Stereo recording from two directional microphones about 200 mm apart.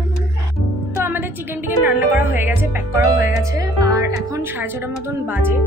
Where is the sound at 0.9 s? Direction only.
10° right (ahead or behind).